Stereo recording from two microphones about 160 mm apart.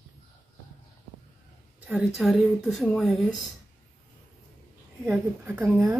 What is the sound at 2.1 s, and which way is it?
Speech, centre (ahead or behind).